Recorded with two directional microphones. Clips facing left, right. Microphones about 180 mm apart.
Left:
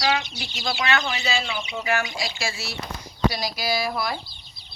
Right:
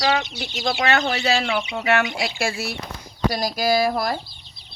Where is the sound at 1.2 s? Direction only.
70° right (ahead or behind).